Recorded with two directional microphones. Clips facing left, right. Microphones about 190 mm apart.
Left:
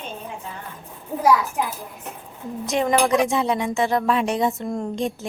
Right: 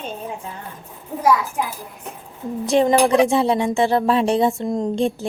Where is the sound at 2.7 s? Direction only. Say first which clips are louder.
Right 4 dB; 30° right (ahead or behind).